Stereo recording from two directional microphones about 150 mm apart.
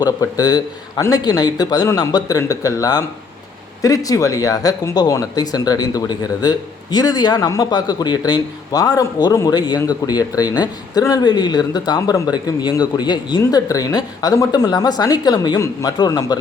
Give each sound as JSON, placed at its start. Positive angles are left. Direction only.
{"t": 0.0, "sound": "speech", "side_deg": 25}